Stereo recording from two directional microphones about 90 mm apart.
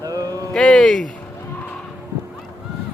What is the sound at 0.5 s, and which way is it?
Speech, 5° left (ahead or behind).